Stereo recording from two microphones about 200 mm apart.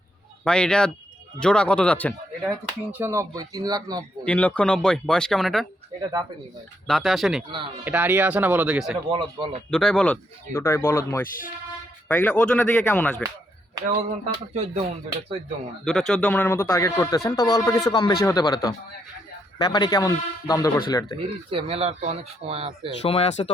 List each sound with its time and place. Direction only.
0.4 s speech: 5° left (ahead or behind)
2.9 s speech: 15° right (ahead or behind)
4.3 s speech: 5° left (ahead or behind)
6.0 s speech: 20° right (ahead or behind)
6.8 s speech: centre (ahead or behind)
9.0 s speech: 25° right (ahead or behind)
9.6 s speech: centre (ahead or behind)
13.7 s speech: 20° right (ahead or behind)
15.8 s speech: 5° left (ahead or behind)
21.5 s speech: 30° right (ahead or behind)
23.0 s speech: 30° left (ahead or behind)